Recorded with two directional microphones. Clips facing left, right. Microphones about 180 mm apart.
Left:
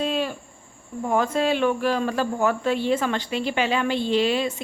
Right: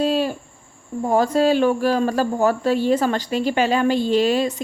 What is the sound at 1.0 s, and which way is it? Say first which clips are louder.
A woman's voice: right 5 dB; 35° right (ahead or behind).